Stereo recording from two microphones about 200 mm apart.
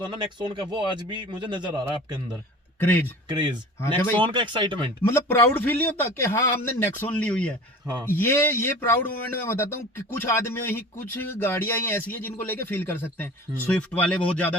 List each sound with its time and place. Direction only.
0.0 s a man's voice: 25° right (ahead or behind)
2.8 s a man's voice: 10° left (ahead or behind)
3.2 s a man's voice: 20° right (ahead or behind)
5.0 s a man's voice: 10° left (ahead or behind)